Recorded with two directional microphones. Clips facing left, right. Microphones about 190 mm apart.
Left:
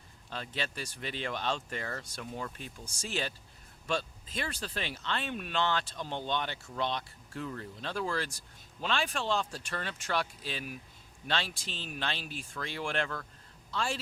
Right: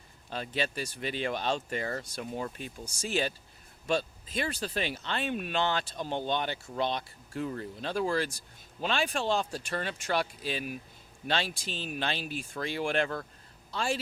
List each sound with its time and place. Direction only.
0.3 s speech: 10° right (ahead or behind)